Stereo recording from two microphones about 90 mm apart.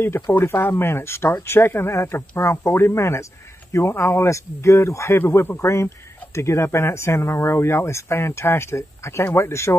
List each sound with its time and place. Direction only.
0.0 s speech: 25° left (ahead or behind)